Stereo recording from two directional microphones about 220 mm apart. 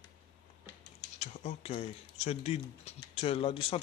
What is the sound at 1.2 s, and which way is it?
Speech, 30° left (ahead or behind).